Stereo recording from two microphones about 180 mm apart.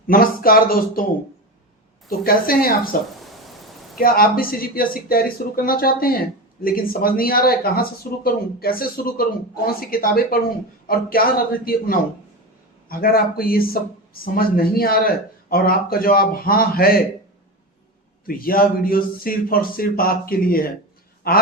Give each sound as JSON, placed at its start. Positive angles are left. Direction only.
{"t": 0.1, "sound": "a man's voice", "side_deg": 55}
{"t": 2.0, "sound": "a man's voice", "side_deg": 55}
{"t": 3.2, "sound": "a sound", "side_deg": 0}
{"t": 3.9, "sound": "a man's voice", "side_deg": 55}
{"t": 18.3, "sound": "a man's voice", "side_deg": 55}